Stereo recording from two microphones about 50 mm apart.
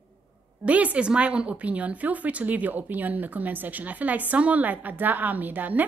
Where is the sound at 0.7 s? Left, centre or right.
Right.